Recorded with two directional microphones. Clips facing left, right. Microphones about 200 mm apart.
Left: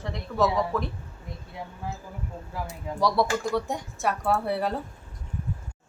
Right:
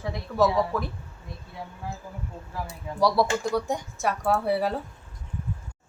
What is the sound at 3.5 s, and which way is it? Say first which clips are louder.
Speech: right 1 dB; centre (ahead or behind).